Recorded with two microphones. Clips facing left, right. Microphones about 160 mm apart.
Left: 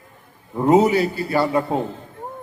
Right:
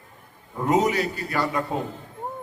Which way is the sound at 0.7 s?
30° left (ahead or behind).